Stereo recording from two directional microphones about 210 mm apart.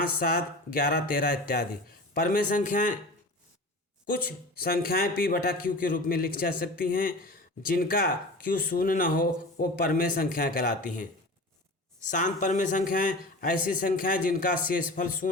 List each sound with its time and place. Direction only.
0.0 s a man's voice: 45° left (ahead or behind)
4.0 s speech: 45° left (ahead or behind)
12.1 s a man's voice: 35° left (ahead or behind)